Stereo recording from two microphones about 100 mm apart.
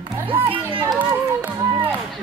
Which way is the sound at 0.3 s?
60° right (ahead or behind).